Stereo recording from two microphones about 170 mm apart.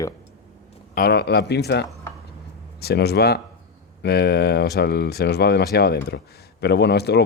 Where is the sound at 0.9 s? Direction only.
70° left (ahead or behind).